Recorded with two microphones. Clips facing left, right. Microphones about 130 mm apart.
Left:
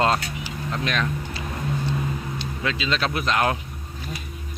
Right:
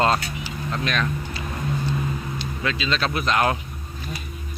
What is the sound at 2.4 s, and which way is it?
Speech, 20° left (ahead or behind).